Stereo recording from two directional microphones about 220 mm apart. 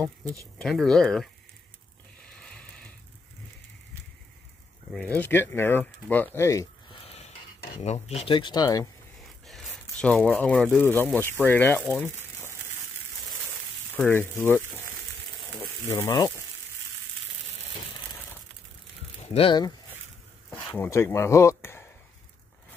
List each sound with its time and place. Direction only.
0.0 s speech: 15° right (ahead or behind)
0.6 s speech: centre (ahead or behind)
2.3 s a sound: 5° left (ahead or behind)
4.9 s speech: 5° left (ahead or behind)
7.8 s speech: 30° left (ahead or behind)
10.0 s speech: 5° left (ahead or behind)
13.9 s speech: 10° left (ahead or behind)
15.6 s speech: 15° left (ahead or behind)
19.2 s speech: 25° left (ahead or behind)
20.4 s speech: 10° left (ahead or behind)